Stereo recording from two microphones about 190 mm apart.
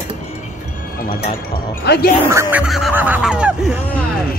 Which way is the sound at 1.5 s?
55° left (ahead or behind).